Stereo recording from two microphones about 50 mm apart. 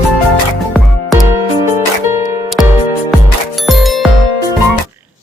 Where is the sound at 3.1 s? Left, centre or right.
Centre.